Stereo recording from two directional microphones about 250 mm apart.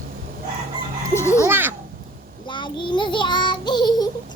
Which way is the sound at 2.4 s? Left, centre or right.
Centre.